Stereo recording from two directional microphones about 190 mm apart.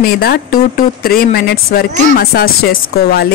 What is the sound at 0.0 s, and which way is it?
A woman's voice, 55° left (ahead or behind).